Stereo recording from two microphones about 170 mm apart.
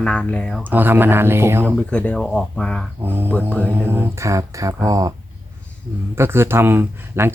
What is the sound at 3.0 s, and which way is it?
Speech, 10° right (ahead or behind).